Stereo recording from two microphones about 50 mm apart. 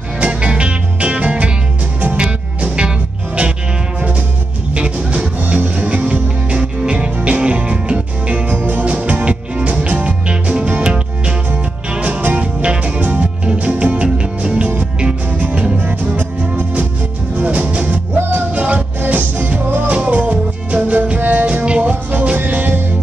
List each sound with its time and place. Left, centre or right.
0.2 s music: right
2.6 s music: right
4.7 s music: right
8.5 s music: right
8.8 s music: right
15.8 s music: right